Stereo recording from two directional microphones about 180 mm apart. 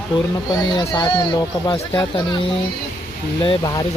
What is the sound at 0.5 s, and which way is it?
Speech, 25° left (ahead or behind).